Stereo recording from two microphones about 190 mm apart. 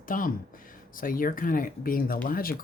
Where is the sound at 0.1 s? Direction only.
45° left (ahead or behind).